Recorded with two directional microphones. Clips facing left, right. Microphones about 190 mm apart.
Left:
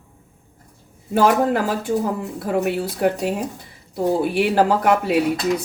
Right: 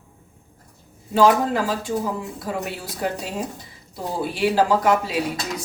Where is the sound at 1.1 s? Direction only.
55° left (ahead or behind).